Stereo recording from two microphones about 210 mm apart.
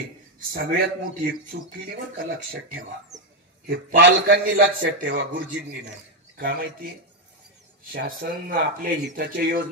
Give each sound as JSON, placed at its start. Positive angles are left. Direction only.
{"t": 0.5, "sound": "a man's voice", "side_deg": -50}
{"t": 7.9, "sound": "a man's voice", "side_deg": -45}